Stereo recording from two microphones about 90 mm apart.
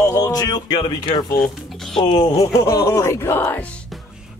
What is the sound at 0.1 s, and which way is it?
Speech, 40° left (ahead or behind).